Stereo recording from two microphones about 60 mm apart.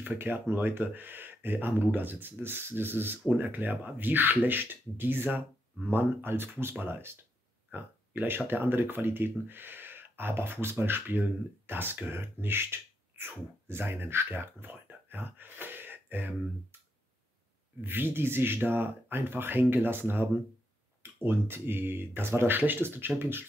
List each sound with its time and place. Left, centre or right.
0.0 s speech: right
17.8 s speech: right